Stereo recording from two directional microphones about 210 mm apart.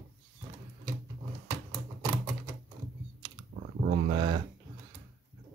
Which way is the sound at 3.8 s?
20° right (ahead or behind).